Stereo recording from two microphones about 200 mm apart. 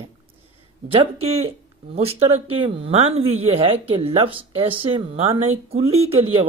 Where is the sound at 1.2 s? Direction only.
30° right (ahead or behind).